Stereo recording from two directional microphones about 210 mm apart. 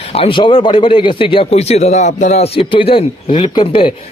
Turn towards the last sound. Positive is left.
turn(degrees=25)  # may be behind; listen again after turning